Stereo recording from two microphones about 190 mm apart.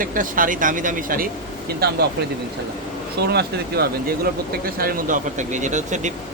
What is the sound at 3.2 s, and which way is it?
Speech, 55° right (ahead or behind).